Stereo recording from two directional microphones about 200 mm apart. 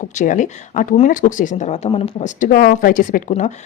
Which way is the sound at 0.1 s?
40° left (ahead or behind).